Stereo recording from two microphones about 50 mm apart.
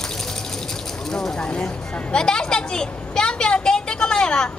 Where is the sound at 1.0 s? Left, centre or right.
Centre.